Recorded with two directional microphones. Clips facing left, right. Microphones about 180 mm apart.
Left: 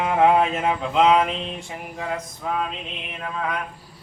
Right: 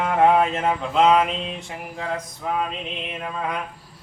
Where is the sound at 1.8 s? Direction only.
5° left (ahead or behind).